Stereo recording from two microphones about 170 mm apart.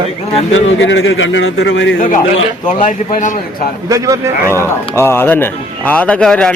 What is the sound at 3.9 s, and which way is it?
Speech, 20° right (ahead or behind).